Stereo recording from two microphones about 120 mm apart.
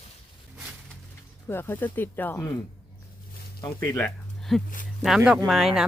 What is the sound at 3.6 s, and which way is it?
Speech, 25° left (ahead or behind).